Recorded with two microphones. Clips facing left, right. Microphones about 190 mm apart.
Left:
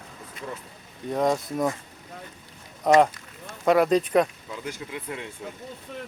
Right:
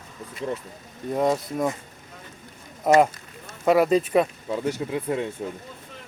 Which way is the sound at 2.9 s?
5° right (ahead or behind).